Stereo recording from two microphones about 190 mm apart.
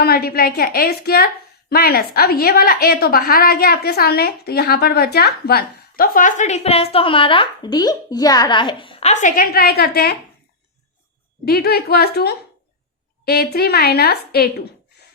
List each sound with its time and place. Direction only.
0.0 s a woman's voice: 50° left (ahead or behind)
11.4 s a woman's voice: 55° left (ahead or behind)